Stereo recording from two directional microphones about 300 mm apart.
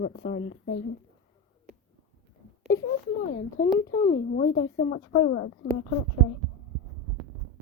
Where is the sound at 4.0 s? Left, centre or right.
Left.